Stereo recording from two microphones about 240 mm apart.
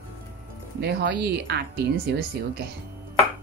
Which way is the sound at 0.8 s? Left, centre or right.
Right.